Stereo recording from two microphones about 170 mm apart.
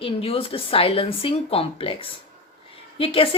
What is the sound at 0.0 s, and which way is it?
A woman's voice, 35° left (ahead or behind).